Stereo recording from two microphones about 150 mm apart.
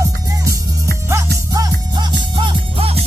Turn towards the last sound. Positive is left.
turn(degrees=-40)  # may be behind; listen again after turning